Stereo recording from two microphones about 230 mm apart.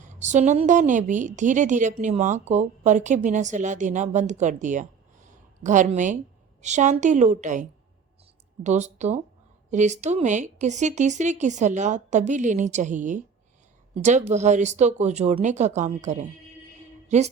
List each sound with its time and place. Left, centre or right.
0.0 s a woman's voice: right